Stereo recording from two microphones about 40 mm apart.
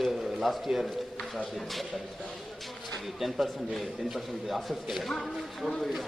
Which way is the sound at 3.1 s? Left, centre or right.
Centre.